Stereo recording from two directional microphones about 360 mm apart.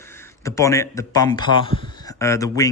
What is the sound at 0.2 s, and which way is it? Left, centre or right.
Speech, centre.